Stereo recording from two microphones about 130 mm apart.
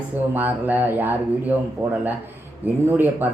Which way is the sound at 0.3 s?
15° right (ahead or behind).